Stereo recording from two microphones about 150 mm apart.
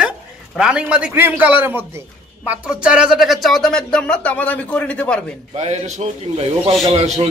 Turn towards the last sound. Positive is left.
turn(degrees=-40)  # may be behind; listen again after turning